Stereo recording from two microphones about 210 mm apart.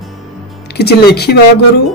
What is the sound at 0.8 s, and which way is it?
Speech, 50° left (ahead or behind).